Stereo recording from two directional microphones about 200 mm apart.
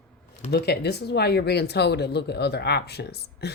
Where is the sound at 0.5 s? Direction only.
55° left (ahead or behind).